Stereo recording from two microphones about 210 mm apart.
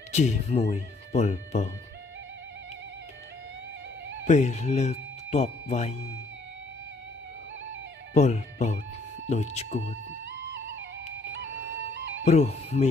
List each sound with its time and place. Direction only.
0.1 s speech: 30° left (ahead or behind)
4.3 s speech: 35° left (ahead or behind)
8.1 s speech: 35° left (ahead or behind)
10.2 s music: 60° right (ahead or behind)
12.3 s speech: 30° left (ahead or behind)